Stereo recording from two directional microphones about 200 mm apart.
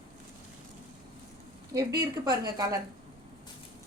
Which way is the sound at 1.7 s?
20° right (ahead or behind).